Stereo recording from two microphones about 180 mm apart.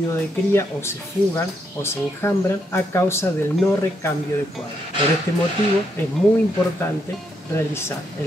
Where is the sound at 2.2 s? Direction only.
15° left (ahead or behind).